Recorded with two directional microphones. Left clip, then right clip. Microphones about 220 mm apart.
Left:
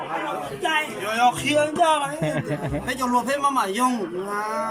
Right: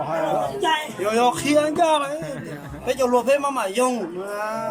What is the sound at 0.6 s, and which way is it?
Speech, 20° right (ahead or behind).